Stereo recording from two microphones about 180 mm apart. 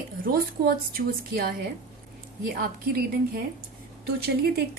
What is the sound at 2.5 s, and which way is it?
Speech, 55° right (ahead or behind).